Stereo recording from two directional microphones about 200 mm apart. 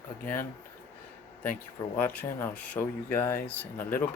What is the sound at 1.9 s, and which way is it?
Speech, 10° left (ahead or behind).